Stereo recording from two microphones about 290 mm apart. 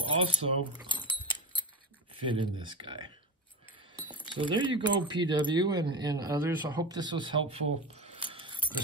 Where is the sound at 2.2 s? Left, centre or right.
Centre.